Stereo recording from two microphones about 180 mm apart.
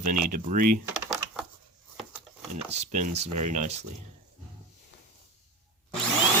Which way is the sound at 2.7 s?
40° right (ahead or behind).